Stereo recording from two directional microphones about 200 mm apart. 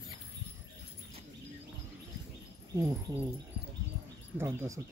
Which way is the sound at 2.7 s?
15° right (ahead or behind).